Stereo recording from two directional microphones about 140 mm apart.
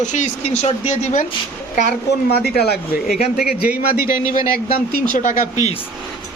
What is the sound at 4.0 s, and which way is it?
Speech, 85° left.